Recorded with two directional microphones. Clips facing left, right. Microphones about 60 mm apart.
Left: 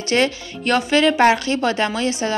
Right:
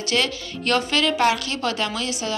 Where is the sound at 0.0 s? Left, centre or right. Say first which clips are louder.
Left 5 dB; left.